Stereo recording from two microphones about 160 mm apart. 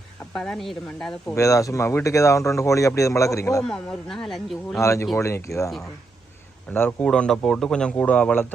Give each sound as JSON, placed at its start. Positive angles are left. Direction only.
{"t": 0.3, "sound": "speech", "side_deg": 5}
{"t": 1.4, "sound": "speech", "side_deg": 20}
{"t": 3.6, "sound": "speech", "side_deg": 5}
{"t": 4.8, "sound": "speech", "side_deg": 20}